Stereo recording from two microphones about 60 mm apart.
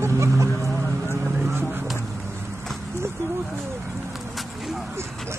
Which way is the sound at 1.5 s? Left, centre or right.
Right.